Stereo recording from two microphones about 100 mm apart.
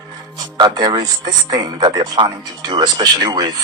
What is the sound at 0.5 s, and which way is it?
Speech, 45° right (ahead or behind).